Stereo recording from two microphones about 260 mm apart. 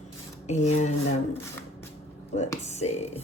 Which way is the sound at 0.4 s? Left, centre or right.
Left.